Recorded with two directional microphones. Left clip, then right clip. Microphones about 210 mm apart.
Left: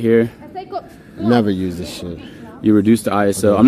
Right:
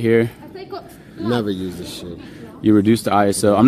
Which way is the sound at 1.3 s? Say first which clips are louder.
Left 5 dB; 35° left (ahead or behind).